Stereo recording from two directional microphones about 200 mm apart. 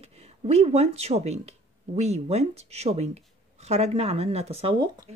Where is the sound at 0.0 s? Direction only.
30° right (ahead or behind).